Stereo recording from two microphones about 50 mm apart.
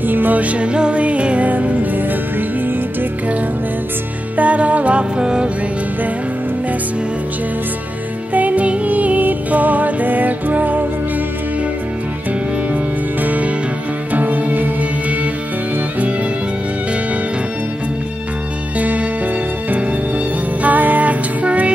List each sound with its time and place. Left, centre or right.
0.0 s music: right
4.4 s music: right
8.3 s music: right
13.2 s music: right
18.8 s music: right
20.6 s music: right